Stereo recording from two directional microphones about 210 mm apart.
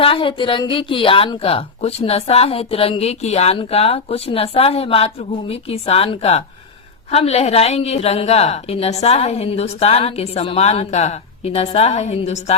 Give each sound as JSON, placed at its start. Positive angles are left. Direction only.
{"t": 0.0, "sound": "a woman's voice", "side_deg": 25}